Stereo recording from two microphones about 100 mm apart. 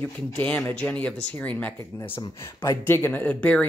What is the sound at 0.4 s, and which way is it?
Speech, 15° left (ahead or behind).